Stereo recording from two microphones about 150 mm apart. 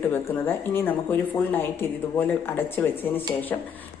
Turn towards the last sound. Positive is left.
turn(degrees=10)  # may be behind; listen again after turning